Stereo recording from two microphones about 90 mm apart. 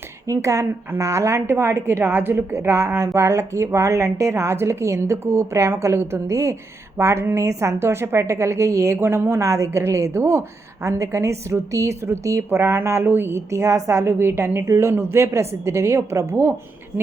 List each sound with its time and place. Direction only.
0.3 s a woman's voice: 35° right (ahead or behind)